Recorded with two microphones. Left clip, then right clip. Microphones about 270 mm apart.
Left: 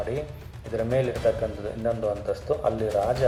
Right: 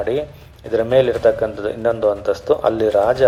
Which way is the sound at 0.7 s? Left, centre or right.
Right.